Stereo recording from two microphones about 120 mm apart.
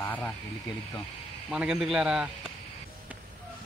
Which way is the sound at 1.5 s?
5° right (ahead or behind).